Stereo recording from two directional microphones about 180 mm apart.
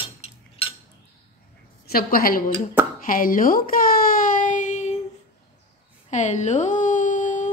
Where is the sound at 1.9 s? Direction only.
55° left (ahead or behind).